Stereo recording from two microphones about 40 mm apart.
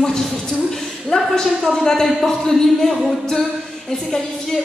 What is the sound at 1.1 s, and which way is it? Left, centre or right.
A woman's voice, centre.